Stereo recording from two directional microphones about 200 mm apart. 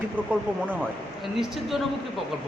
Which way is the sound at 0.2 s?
10° right (ahead or behind).